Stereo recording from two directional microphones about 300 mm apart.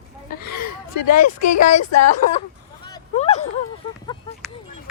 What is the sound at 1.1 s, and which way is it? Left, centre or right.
Speech, left.